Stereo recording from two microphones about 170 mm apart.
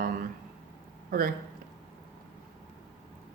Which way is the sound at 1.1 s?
55° right (ahead or behind).